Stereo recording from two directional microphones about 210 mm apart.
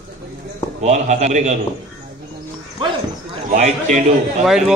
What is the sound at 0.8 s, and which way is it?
Speech, 35° right (ahead or behind).